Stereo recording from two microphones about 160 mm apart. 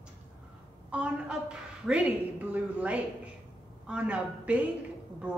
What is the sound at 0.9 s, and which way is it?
A woman's voice, 5° right (ahead or behind).